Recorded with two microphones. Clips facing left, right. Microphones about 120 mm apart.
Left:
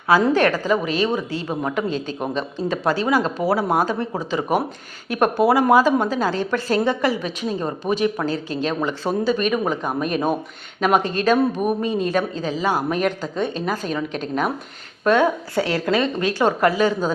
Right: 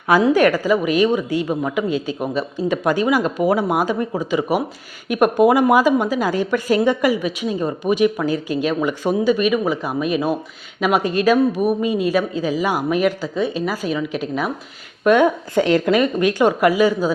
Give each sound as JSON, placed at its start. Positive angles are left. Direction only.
{"t": 0.3, "sound": "speech", "side_deg": -10}